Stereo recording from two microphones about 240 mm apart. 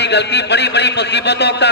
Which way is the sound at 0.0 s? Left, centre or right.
Left.